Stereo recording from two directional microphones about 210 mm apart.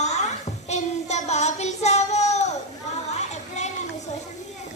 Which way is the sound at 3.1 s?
35° left (ahead or behind).